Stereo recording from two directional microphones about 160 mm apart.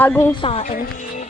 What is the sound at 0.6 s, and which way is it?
Speech, 60° left (ahead or behind).